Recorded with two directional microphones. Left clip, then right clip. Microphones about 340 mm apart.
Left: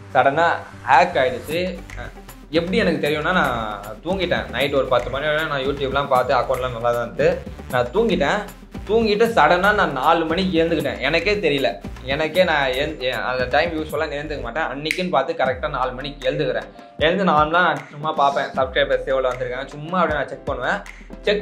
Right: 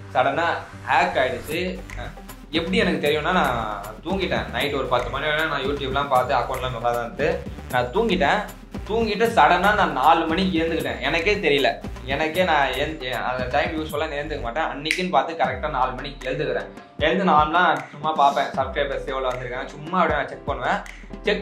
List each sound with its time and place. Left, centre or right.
0.1 s speech: left